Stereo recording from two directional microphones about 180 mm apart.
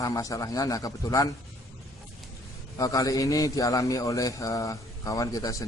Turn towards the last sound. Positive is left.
turn(degrees=20)  # may be behind; listen again after turning